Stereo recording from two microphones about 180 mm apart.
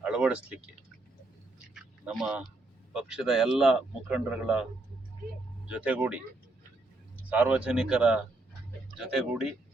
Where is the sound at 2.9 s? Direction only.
5° right (ahead or behind).